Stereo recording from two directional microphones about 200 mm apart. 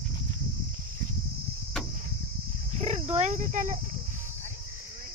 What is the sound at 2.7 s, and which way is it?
Speech, 30° right (ahead or behind).